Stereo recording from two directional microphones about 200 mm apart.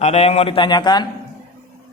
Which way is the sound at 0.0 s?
30° left (ahead or behind).